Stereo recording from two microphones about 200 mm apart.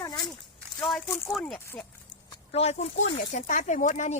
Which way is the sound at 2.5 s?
35° left (ahead or behind).